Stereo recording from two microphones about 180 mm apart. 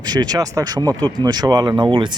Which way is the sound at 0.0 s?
25° right (ahead or behind).